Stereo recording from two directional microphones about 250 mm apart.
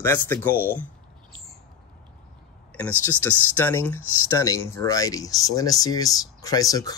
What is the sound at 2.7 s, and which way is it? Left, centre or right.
Speech, centre.